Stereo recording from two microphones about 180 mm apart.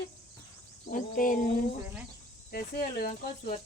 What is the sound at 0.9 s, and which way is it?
Speech, 50° left (ahead or behind).